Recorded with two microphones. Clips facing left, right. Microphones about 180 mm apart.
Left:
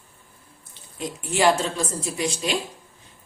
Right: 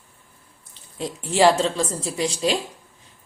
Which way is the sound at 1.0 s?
30° right (ahead or behind).